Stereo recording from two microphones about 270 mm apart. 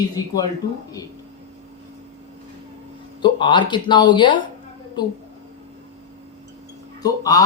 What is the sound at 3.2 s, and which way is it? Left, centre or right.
Speech, centre.